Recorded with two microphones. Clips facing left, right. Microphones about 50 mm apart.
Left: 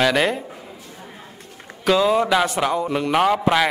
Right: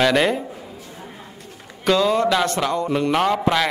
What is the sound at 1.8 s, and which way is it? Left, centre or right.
Speech, centre.